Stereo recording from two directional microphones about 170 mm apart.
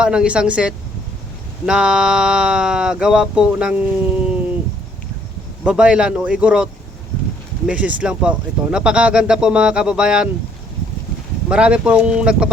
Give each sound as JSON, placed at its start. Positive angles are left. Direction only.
{"t": 0.0, "sound": "speech", "side_deg": -5}
{"t": 5.6, "sound": "speech", "side_deg": -5}
{"t": 7.7, "sound": "speech", "side_deg": -5}
{"t": 11.4, "sound": "speech", "side_deg": -5}